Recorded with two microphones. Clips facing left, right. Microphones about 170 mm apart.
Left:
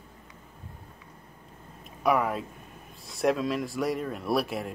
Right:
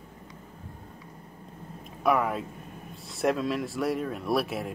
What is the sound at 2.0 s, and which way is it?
Speech, centre (ahead or behind).